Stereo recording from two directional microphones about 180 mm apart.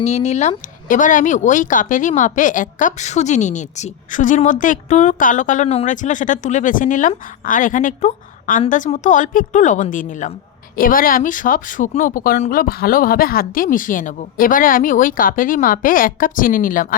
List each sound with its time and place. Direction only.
0.0 s a woman's voice: 40° left (ahead or behind)